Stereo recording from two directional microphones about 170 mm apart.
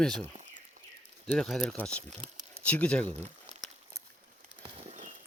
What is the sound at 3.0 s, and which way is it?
Speech, 40° right (ahead or behind).